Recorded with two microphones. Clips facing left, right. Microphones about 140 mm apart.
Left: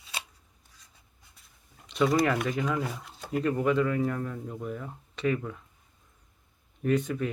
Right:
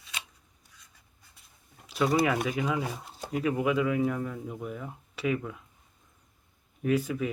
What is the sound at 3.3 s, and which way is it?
Speech, 5° right (ahead or behind).